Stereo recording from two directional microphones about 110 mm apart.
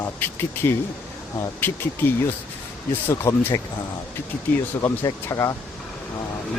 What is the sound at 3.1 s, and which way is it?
Speech, 25° left (ahead or behind).